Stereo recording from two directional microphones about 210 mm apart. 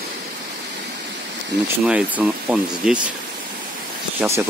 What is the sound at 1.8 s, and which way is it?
Speech, 5° right (ahead or behind).